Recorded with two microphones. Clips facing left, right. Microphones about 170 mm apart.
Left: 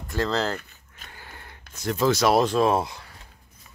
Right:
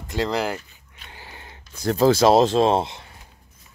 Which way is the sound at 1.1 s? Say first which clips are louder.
Right 3 dB; 20° right (ahead or behind).